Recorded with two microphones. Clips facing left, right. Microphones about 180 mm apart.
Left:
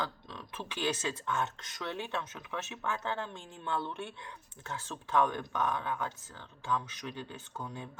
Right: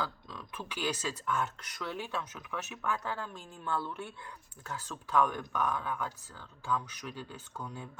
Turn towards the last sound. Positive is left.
turn(degrees=25)  # may be behind; listen again after turning